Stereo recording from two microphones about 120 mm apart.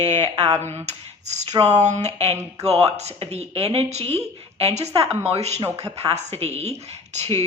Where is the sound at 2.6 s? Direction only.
60° right (ahead or behind).